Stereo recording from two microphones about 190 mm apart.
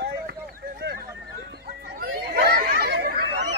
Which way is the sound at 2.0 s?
55° right (ahead or behind).